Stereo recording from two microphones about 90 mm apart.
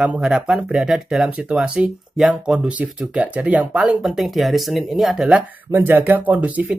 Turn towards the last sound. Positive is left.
turn(degrees=-20)  # may be behind; listen again after turning